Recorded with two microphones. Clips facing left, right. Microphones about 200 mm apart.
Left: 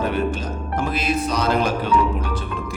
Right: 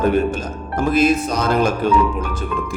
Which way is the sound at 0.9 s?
45° right (ahead or behind).